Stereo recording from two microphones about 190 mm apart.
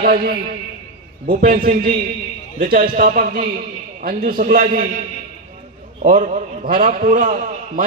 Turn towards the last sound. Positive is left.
turn(degrees=-40)  # may be behind; listen again after turning